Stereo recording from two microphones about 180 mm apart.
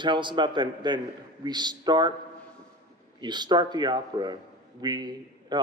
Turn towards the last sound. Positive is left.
turn(degrees=-25)  # may be behind; listen again after turning